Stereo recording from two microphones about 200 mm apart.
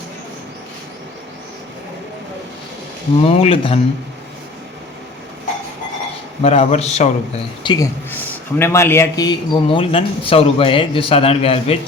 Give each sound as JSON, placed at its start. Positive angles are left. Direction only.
{"t": 3.2, "sound": "speech", "side_deg": 30}
{"t": 6.4, "sound": "a man's voice", "side_deg": 35}
{"t": 7.6, "sound": "speech", "side_deg": 20}